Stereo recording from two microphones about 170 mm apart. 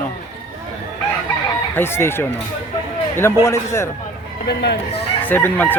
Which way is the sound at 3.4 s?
15° left (ahead or behind).